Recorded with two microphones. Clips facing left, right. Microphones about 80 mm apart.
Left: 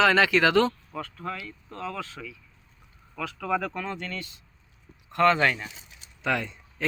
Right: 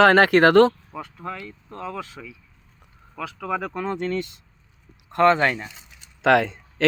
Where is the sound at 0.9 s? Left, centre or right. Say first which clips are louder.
Right 1 dB; centre.